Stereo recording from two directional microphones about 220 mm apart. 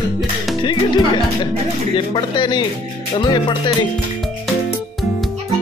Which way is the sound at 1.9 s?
20° left (ahead or behind).